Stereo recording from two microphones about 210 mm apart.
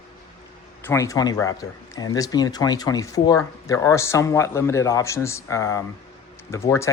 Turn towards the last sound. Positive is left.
turn(degrees=15)  # may be behind; listen again after turning